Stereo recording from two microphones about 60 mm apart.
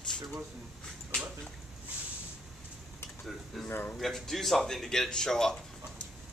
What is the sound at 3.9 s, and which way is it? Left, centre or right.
Speech, centre.